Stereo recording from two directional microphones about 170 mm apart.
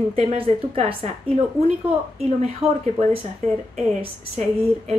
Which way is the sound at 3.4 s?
45° right (ahead or behind).